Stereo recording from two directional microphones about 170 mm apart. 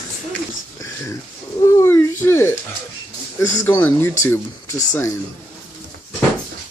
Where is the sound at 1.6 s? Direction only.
15° left (ahead or behind).